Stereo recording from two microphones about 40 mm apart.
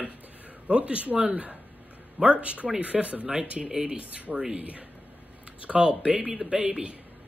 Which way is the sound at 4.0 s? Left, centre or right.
Right.